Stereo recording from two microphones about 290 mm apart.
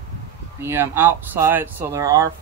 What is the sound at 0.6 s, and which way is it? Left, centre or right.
Speech, centre.